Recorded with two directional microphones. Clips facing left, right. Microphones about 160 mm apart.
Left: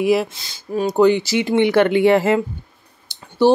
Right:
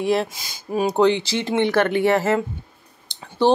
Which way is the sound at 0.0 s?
5° left (ahead or behind).